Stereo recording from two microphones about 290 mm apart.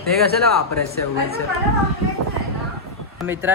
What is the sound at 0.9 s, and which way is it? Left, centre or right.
Speech, right.